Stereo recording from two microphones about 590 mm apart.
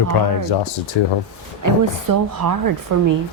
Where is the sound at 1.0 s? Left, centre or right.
Left.